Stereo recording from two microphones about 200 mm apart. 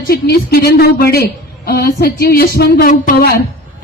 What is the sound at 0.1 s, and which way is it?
A woman's voice, 50° left (ahead or behind).